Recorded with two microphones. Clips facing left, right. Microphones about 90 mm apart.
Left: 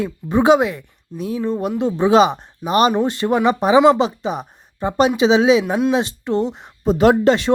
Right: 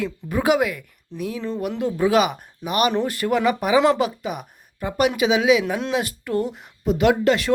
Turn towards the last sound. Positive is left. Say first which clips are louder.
# left 4 dB
turn(degrees=30)  # may be behind; listen again after turning